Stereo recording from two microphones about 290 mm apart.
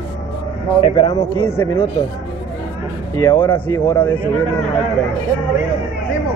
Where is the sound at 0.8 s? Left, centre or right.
Centre.